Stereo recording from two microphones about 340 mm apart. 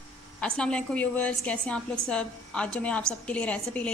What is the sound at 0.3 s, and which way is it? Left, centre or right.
A woman's voice, centre.